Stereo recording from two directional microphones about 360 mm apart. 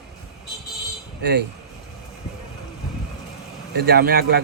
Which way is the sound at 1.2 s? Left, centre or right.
Right.